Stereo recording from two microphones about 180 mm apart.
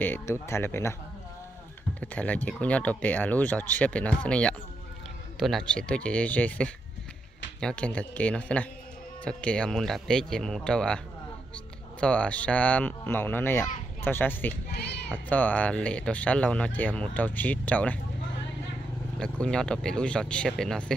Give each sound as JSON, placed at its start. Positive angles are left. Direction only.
{"t": 0.0, "sound": "speech", "side_deg": 10}
{"t": 2.0, "sound": "speech", "side_deg": 10}
{"t": 14.7, "sound": "speech", "side_deg": 65}
{"t": 15.0, "sound": "speech", "side_deg": 10}
{"t": 19.1, "sound": "speech", "side_deg": 5}